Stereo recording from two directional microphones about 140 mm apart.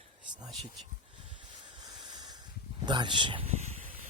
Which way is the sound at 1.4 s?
30° right (ahead or behind).